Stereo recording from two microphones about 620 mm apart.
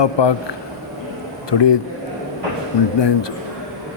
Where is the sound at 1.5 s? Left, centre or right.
Left.